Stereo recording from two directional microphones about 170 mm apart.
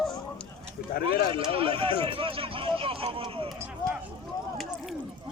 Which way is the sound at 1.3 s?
35° right (ahead or behind).